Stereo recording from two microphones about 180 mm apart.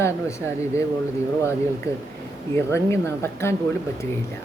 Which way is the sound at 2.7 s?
15° left (ahead or behind).